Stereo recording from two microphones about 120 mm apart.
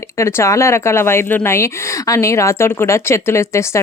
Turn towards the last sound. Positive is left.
turn(degrees=25)  # may be behind; listen again after turning